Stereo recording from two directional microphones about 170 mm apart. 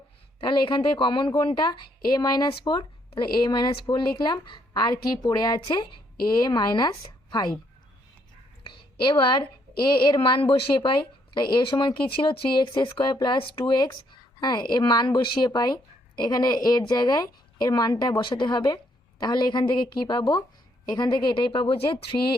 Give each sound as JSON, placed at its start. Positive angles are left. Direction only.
{"t": 0.3, "sound": "a woman's voice", "side_deg": 30}
{"t": 8.6, "sound": "a woman's voice", "side_deg": 30}